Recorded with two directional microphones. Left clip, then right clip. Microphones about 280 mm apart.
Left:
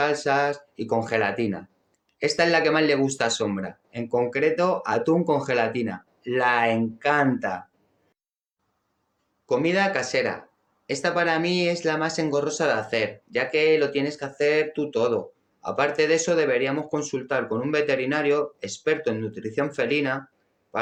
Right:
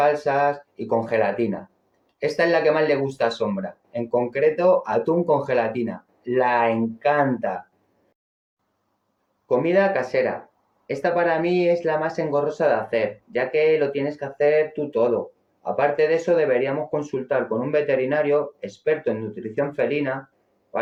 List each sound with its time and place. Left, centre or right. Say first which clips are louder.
0.0 s speech: right 3 dB; left
9.5 s speech: right 3 dB; centre